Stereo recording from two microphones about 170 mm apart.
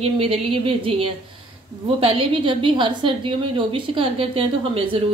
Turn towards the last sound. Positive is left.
turn(degrees=-35)  # may be behind; listen again after turning